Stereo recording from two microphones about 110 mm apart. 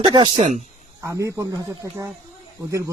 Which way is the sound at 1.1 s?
30° right (ahead or behind).